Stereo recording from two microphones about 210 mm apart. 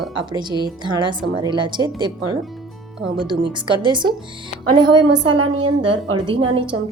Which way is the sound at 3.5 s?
20° right (ahead or behind).